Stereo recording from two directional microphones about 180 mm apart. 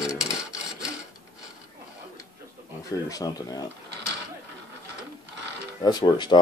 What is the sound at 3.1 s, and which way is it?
Speech, 20° left (ahead or behind).